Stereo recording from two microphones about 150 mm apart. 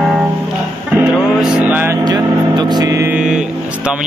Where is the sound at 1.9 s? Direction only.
25° right (ahead or behind).